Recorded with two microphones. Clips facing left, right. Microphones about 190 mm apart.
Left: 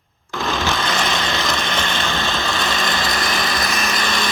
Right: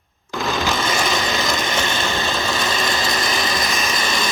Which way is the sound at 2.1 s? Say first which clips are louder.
Even; centre (ahead or behind).